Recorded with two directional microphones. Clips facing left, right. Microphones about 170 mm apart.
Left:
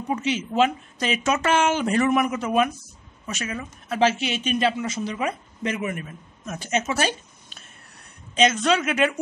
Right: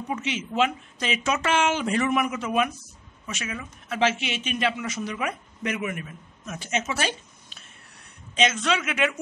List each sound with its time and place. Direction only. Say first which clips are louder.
0.1 s speech: left 5 dB; 35° left (ahead or behind)